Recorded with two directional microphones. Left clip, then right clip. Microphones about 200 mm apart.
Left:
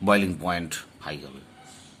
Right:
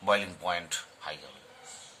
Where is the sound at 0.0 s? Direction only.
30° left (ahead or behind).